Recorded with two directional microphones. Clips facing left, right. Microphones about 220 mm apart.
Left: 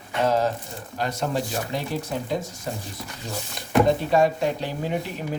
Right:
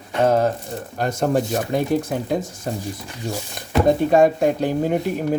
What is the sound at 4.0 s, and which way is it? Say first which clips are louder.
Speech: right 5 dB; 50° right (ahead or behind).